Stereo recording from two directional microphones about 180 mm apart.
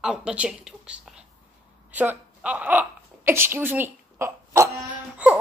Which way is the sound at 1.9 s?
10° right (ahead or behind).